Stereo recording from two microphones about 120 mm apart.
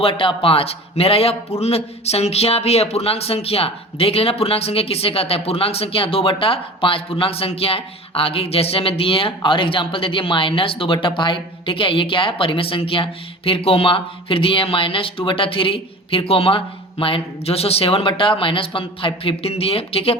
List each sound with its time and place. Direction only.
0.0 s speech: 50° left (ahead or behind)